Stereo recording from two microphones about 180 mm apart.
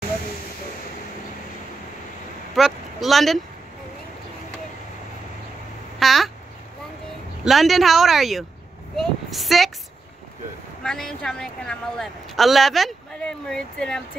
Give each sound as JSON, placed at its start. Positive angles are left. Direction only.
{"t": 2.5, "sound": "speech", "side_deg": 0}
{"t": 5.9, "sound": "a sound", "side_deg": 0}
{"t": 7.4, "sound": "a woman's voice", "side_deg": 0}
{"t": 10.8, "sound": "a woman's voice", "side_deg": 5}